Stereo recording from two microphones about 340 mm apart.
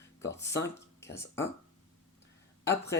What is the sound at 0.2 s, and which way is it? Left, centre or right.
Speech, centre.